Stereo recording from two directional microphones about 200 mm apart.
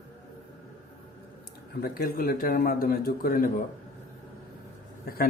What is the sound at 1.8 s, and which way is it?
A man's voice, 50° left (ahead or behind).